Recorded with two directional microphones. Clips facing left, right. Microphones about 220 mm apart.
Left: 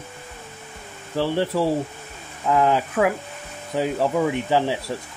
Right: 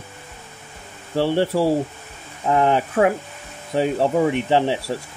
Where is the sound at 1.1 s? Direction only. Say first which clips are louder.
Right 3 dB; 30° right (ahead or behind).